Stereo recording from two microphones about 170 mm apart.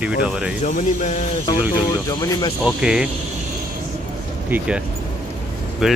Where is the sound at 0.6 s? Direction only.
45° left (ahead or behind).